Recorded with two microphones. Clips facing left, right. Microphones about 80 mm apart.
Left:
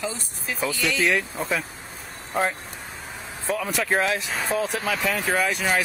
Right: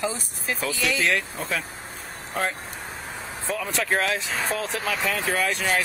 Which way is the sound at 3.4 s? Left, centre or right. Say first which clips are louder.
Left 2 dB; centre.